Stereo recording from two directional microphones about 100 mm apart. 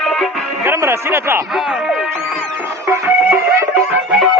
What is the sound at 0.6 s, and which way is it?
Speech, 25° right (ahead or behind).